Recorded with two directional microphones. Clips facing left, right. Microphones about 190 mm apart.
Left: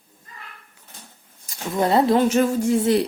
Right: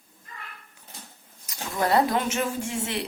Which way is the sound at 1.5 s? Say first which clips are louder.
Left 4 dB; 25° left (ahead or behind).